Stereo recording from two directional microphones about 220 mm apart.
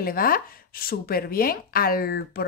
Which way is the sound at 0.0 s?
40° left (ahead or behind).